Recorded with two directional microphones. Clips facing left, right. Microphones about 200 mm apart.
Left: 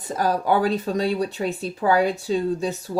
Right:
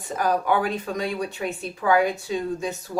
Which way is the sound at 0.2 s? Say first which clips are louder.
Left 2 dB; 35° left (ahead or behind).